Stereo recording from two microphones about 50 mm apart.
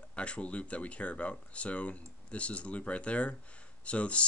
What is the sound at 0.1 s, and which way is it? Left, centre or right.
Speech, left.